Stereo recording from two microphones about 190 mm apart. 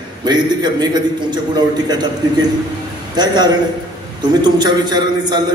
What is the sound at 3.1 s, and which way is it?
A man's voice, 20° right (ahead or behind).